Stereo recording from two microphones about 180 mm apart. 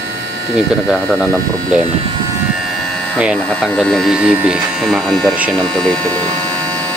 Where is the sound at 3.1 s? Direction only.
Centre (ahead or behind).